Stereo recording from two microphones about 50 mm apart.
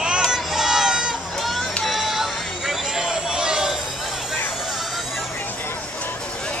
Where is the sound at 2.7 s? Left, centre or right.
Centre.